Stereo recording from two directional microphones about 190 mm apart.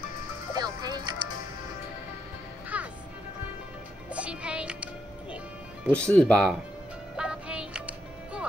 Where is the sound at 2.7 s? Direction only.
5° right (ahead or behind).